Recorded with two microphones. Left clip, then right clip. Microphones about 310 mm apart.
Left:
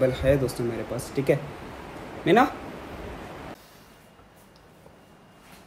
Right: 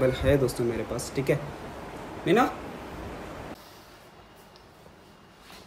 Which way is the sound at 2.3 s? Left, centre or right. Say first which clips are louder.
Left 3 dB; centre.